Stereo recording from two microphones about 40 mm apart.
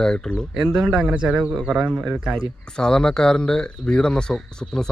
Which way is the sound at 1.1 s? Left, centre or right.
Right.